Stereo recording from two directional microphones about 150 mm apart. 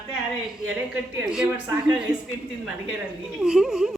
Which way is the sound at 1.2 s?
5° right (ahead or behind).